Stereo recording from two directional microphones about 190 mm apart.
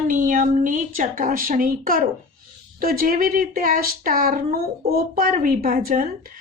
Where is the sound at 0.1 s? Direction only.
45° right (ahead or behind).